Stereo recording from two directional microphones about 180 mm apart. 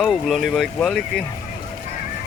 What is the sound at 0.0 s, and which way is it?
Speech, centre (ahead or behind).